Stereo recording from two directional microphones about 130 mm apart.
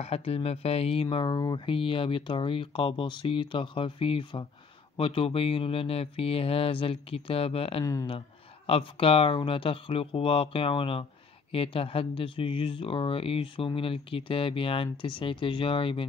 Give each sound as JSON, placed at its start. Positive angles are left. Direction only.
{"t": 0.0, "sound": "speech", "side_deg": 50}
{"t": 1.1, "sound": "speech", "side_deg": 35}
{"t": 7.8, "sound": "speech", "side_deg": 25}
{"t": 8.6, "sound": "speech", "side_deg": 45}